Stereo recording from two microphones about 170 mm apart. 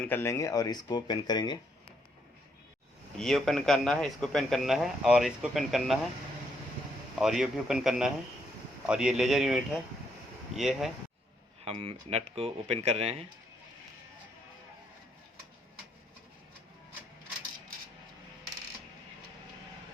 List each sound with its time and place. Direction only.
0.0 s speech: 15° left (ahead or behind)
3.2 s a man's voice: centre (ahead or behind)
7.2 s a man's voice: centre (ahead or behind)
11.6 s speech: 35° right (ahead or behind)